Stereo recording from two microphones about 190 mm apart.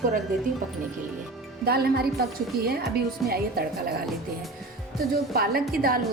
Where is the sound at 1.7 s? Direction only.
55° right (ahead or behind).